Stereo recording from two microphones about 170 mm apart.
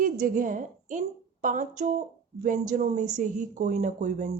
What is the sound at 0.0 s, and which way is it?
A woman's voice, 55° right (ahead or behind).